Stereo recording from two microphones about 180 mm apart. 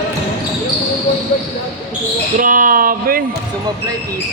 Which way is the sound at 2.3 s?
50° right (ahead or behind).